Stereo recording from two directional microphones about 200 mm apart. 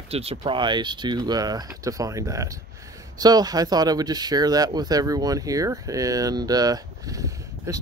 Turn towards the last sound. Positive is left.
turn(degrees=-15)  # may be behind; listen again after turning